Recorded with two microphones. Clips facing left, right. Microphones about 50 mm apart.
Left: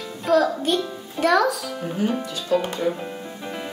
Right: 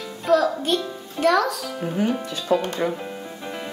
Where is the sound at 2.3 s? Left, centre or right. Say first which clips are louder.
Right 2 dB; right.